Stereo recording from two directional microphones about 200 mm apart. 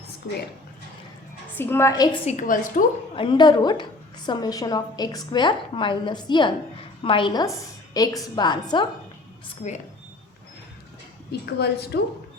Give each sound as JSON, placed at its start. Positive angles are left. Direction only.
{"t": 1.5, "sound": "a woman's voice", "side_deg": 10}
{"t": 2.2, "sound": "a woman's voice", "side_deg": 40}
{"t": 3.2, "sound": "a woman's voice", "side_deg": 25}
{"t": 9.5, "sound": "a woman's voice", "side_deg": 35}
{"t": 11.3, "sound": "a woman's voice", "side_deg": 55}